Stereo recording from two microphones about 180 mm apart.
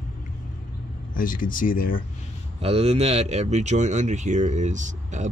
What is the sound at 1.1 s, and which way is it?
Speech, 50° left (ahead or behind).